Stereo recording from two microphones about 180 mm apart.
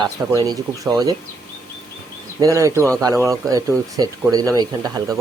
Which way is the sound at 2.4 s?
15° right (ahead or behind).